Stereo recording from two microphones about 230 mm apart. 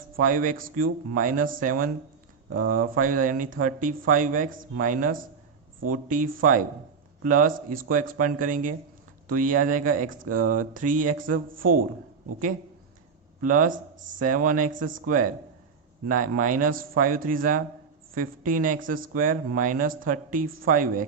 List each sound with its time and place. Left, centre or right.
0.2 s speech: right
13.4 s speech: right